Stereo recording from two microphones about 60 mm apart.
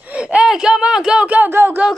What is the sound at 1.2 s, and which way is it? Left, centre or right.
Speech, right.